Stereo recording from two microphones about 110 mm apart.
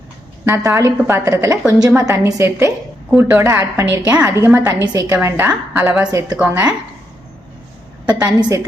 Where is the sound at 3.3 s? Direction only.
25° right (ahead or behind).